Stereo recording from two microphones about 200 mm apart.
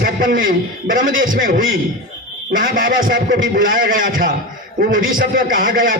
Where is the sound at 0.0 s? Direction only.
45° right (ahead or behind).